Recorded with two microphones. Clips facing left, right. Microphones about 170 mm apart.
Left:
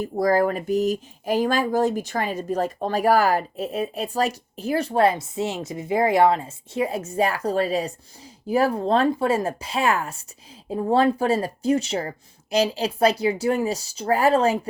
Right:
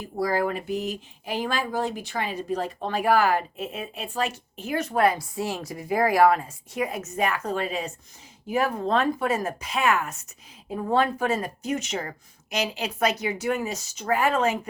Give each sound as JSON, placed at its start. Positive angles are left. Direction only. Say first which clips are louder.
{"t": 0.0, "sound": "speech", "louder": "left 5 dB", "side_deg": 45}